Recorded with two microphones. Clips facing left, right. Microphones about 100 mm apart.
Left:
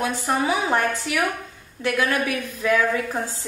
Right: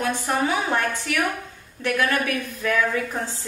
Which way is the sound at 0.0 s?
20° left (ahead or behind).